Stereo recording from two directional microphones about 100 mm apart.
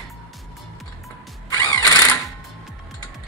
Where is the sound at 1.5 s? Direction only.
35° left (ahead or behind).